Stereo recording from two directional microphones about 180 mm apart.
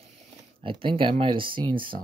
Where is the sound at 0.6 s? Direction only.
30° right (ahead or behind).